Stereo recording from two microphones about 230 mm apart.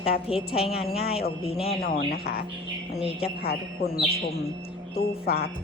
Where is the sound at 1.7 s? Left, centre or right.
Left.